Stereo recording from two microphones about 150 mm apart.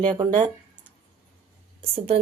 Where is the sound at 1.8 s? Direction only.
40° right (ahead or behind).